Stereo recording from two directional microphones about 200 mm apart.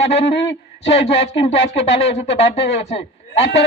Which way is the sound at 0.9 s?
30° left (ahead or behind).